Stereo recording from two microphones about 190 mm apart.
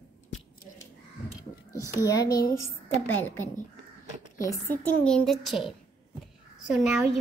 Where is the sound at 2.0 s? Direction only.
20° left (ahead or behind).